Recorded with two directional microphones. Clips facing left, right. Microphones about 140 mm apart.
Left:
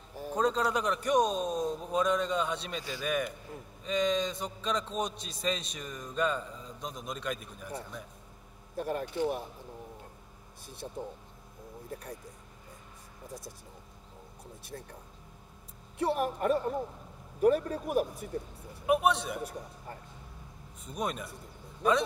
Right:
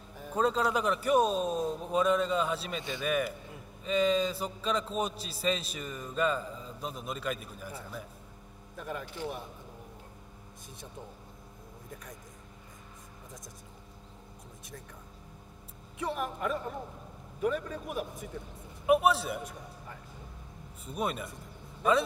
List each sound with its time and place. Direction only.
0.4 s a man's voice: 5° right (ahead or behind)
8.7 s speech: 35° left (ahead or behind)
10.8 s a man's voice: 40° left (ahead or behind)
16.0 s a man's voice: 35° left (ahead or behind)
18.9 s a man's voice: 5° right (ahead or behind)
20.8 s a man's voice: 5° right (ahead or behind)